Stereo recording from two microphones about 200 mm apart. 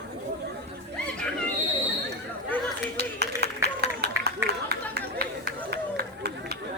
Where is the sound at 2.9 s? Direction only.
55° right (ahead or behind).